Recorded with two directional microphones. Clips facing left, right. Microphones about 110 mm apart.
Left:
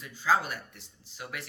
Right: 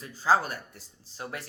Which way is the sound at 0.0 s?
40° right (ahead or behind).